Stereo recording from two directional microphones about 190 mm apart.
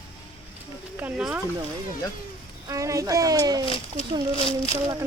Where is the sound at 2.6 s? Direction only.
15° right (ahead or behind).